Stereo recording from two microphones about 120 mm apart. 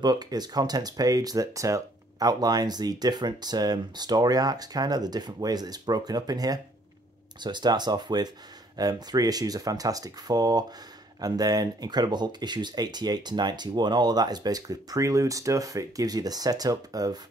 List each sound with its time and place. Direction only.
0.0 s speech: 35° right (ahead or behind)